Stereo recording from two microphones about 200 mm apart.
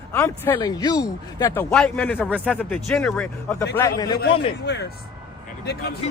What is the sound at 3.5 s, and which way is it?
Speech, 15° left (ahead or behind).